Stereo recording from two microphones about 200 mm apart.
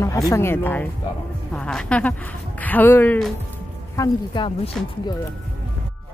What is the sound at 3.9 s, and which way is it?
Speech, 20° left (ahead or behind).